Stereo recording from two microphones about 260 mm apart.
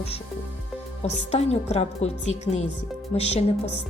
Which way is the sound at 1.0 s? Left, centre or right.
Left.